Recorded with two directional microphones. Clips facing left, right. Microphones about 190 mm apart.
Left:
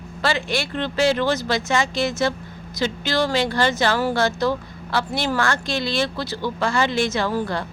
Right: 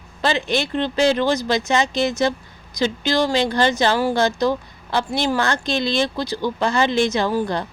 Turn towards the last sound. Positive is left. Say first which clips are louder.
# right 2 dB
turn(degrees=-20)  # may be behind; listen again after turning